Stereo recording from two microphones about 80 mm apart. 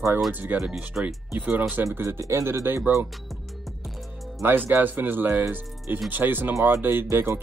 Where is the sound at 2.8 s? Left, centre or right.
Centre.